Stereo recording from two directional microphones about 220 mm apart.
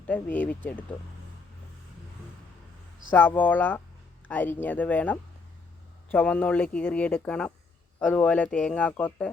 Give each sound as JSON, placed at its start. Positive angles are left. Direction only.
{"t": 0.1, "sound": "speech", "side_deg": 5}
{"t": 3.1, "sound": "speech", "side_deg": 10}